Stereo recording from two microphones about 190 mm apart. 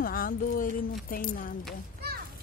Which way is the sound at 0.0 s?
50° left (ahead or behind).